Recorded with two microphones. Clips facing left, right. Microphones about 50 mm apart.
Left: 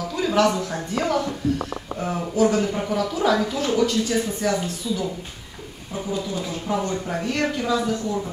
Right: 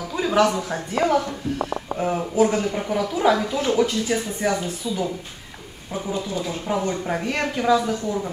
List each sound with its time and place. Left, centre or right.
0.2 s speech: centre
6.7 s speech: right